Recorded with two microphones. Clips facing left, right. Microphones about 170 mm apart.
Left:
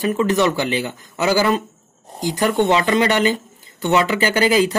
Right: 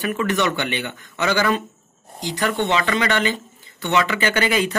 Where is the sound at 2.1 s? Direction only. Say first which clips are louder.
Left 5 dB; 45° left (ahead or behind).